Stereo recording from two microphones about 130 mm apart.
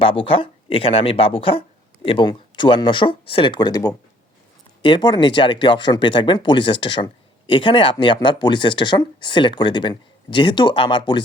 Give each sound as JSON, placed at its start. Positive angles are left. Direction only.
{"t": 0.0, "sound": "speech", "side_deg": 45}